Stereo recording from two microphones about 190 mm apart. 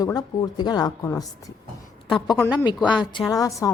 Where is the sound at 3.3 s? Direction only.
15° left (ahead or behind).